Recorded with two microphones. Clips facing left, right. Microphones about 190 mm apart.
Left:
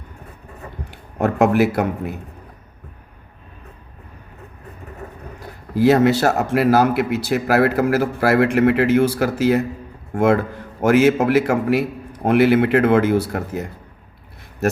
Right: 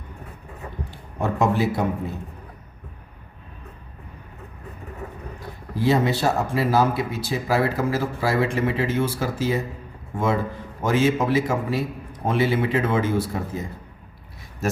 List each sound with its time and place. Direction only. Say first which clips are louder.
0.9 s a man's voice: left 6 dB; 80° left
5.7 s speech: left 7 dB; 80° left
14.6 s a sound: left 5 dB; 65° left (ahead or behind)